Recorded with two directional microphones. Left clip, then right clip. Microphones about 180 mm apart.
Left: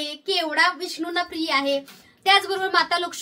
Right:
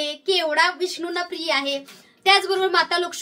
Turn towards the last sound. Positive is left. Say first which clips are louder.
# right 1 dB
turn(degrees=-15)  # may be behind; listen again after turning